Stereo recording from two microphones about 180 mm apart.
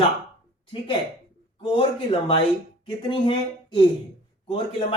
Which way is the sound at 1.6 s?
30° left (ahead or behind).